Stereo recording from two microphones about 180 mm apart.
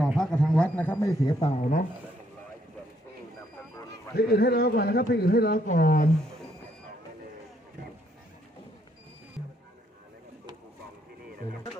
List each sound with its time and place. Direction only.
0.1 s a sound: 5° left (ahead or behind); by 1.5 s 20° left (ahead or behind)
1.5 s speech: 40° left (ahead or behind)
4.1 s a man's voice: 60° left (ahead or behind)